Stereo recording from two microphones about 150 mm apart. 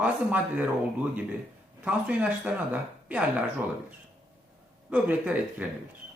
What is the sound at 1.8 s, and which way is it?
Speech, 10° right (ahead or behind).